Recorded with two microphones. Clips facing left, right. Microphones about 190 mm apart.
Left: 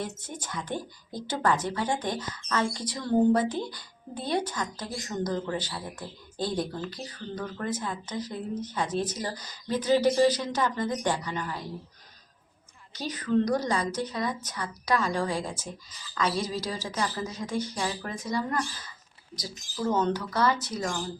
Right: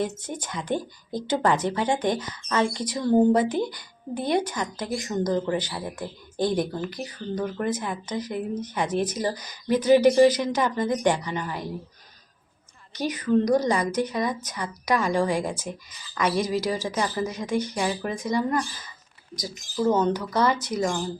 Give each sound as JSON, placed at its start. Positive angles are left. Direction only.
{"t": 0.2, "sound": "speech", "side_deg": -20}
{"t": 12.9, "sound": "speech", "side_deg": -15}